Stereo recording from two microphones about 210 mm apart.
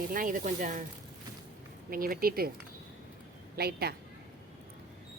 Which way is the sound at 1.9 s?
45° right (ahead or behind).